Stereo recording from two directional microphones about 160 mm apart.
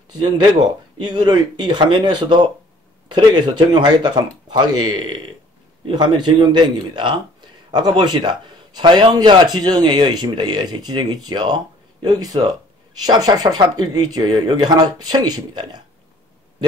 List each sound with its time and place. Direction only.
0.9 s a man's voice: 30° right (ahead or behind)